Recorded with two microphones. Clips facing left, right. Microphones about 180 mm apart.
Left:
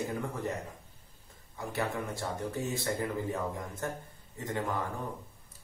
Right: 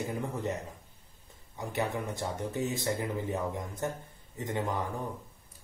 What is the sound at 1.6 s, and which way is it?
Speech, 20° right (ahead or behind).